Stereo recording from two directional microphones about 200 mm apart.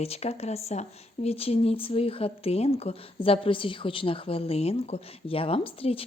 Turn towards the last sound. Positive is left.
turn(degrees=30)  # may be behind; listen again after turning